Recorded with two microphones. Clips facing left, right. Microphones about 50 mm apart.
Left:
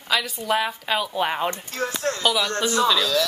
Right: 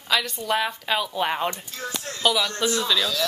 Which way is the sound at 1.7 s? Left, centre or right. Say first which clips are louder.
Left 7 dB; left.